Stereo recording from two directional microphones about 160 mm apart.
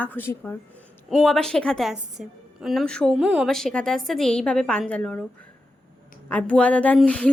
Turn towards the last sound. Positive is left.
turn(degrees=5)  # may be behind; listen again after turning